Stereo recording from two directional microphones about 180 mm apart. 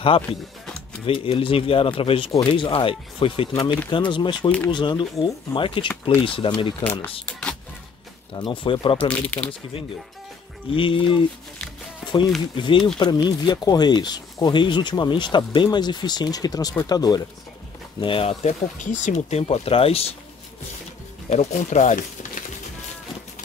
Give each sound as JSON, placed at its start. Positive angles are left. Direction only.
{"t": 1.0, "sound": "speech", "side_deg": 30}
{"t": 8.4, "sound": "speech", "side_deg": 25}
{"t": 8.9, "sound": "speech", "side_deg": 5}
{"t": 10.7, "sound": "speech", "side_deg": 30}
{"t": 12.5, "sound": "speech", "side_deg": 25}
{"t": 21.3, "sound": "speech", "side_deg": 40}